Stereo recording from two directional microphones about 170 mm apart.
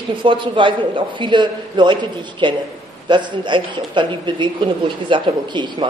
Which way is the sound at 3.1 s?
25° right (ahead or behind).